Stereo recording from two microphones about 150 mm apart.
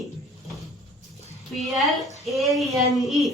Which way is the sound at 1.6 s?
Centre (ahead or behind).